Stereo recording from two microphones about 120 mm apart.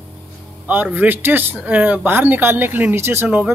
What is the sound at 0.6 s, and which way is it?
Speech, 15° right (ahead or behind).